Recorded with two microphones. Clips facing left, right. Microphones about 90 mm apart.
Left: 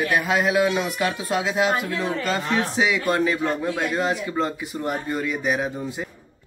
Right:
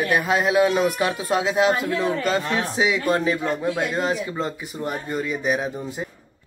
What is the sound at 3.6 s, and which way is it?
Speech, centre (ahead or behind).